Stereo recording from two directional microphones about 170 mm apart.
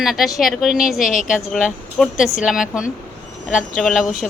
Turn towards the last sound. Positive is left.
turn(degrees=0)  # may be behind; listen again after turning